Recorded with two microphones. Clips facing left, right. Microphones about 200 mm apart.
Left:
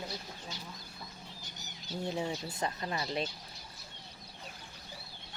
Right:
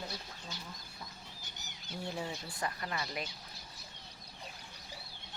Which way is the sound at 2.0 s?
20° left (ahead or behind).